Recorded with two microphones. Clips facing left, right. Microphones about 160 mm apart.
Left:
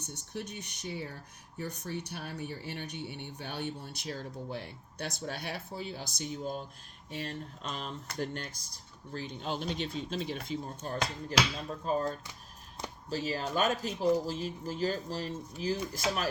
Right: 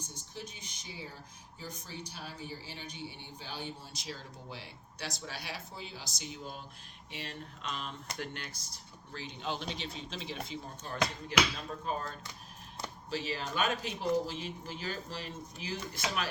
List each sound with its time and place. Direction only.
0.1 s speech: 65° left (ahead or behind); by 16.2 s 40° left (ahead or behind)